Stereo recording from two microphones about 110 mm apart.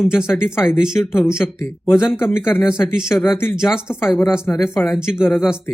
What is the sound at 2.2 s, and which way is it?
Speech, 20° left (ahead or behind).